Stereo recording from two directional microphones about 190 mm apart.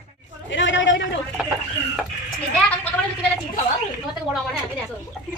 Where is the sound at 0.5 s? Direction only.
75° left (ahead or behind).